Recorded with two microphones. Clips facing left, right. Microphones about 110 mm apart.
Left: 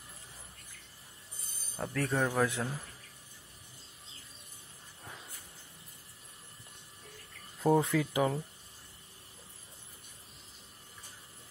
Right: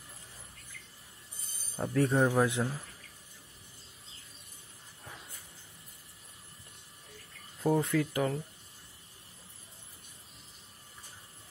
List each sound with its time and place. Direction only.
1.8 s speech: 20° right (ahead or behind)
7.6 s speech: 5° left (ahead or behind)